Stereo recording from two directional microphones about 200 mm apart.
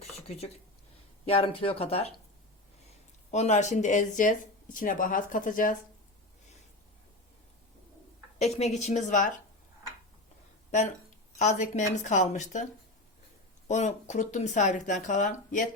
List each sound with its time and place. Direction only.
0.0 s a sound: 30° left (ahead or behind)
1.2 s speech: 30° left (ahead or behind)
3.3 s speech: 35° left (ahead or behind)
8.4 s speech: 30° left (ahead or behind)
11.3 s speech: 35° left (ahead or behind)
13.7 s speech: 35° left (ahead or behind)